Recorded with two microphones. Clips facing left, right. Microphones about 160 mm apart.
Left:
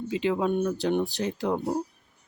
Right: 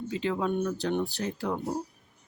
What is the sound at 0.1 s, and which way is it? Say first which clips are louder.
Speech: left 4 dB; 15° left (ahead or behind).